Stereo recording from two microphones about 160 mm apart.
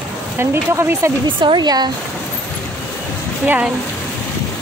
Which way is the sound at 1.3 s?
30° right (ahead or behind).